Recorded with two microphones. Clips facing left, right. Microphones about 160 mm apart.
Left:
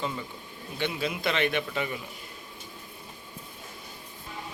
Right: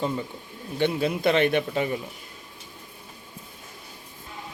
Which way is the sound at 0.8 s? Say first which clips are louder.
Right 7 dB; 50° right (ahead or behind).